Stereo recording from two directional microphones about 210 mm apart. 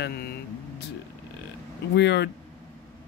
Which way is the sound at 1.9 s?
55° left (ahead or behind).